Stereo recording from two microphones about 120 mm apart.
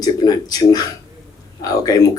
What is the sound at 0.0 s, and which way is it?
Speech, 35° left (ahead or behind).